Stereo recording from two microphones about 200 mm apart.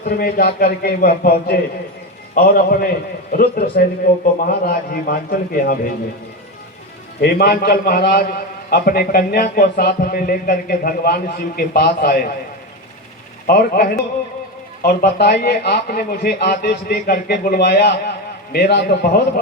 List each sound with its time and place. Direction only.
0.0 s a man's voice: 50° left (ahead or behind)
7.2 s a man's voice: 50° left (ahead or behind)
13.5 s a man's voice: 50° left (ahead or behind)